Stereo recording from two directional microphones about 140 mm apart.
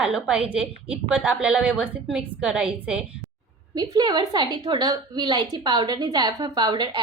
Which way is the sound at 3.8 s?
30° right (ahead or behind).